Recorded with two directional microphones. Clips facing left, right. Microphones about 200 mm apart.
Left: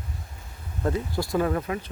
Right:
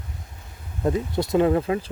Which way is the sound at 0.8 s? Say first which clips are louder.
Right 4 dB; 20° right (ahead or behind).